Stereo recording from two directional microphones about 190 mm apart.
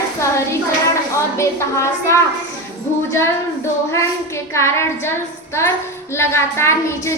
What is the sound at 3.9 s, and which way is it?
A woman's voice, 15° left (ahead or behind).